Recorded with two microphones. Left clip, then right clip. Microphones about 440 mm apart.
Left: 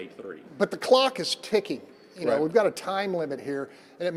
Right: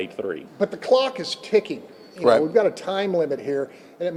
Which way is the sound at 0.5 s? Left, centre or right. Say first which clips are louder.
Right 2 dB; left.